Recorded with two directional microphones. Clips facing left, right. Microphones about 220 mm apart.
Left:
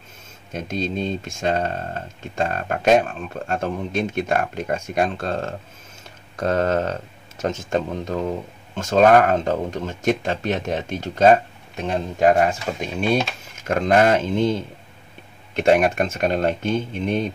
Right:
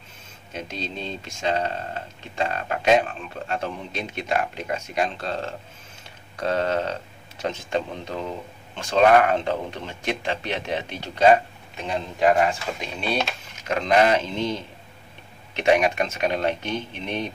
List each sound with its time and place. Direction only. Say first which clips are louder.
0.5 s speech: left 7 dB; 45° left (ahead or behind)